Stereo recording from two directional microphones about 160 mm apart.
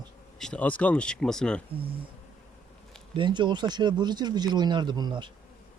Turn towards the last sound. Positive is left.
turn(degrees=-30)  # may be behind; listen again after turning